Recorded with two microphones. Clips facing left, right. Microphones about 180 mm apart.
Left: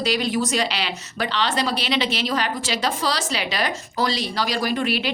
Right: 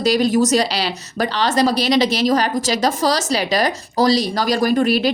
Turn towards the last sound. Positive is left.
turn(degrees=-40)  # may be behind; listen again after turning